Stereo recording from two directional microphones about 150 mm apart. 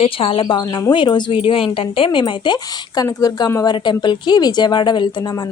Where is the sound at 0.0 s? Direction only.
40° left (ahead or behind).